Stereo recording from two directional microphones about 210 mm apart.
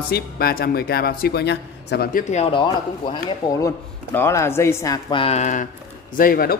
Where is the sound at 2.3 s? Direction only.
25° left (ahead or behind).